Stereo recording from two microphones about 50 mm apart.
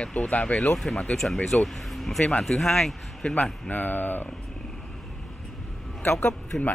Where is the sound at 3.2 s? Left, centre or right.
Left.